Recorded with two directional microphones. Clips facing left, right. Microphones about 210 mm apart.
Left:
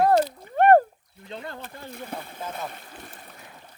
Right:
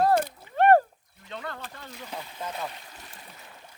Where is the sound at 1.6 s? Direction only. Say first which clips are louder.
Left 4 dB; 55° left (ahead or behind).